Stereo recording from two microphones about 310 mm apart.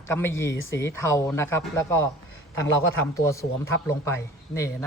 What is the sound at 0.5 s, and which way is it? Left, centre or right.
Speech, left.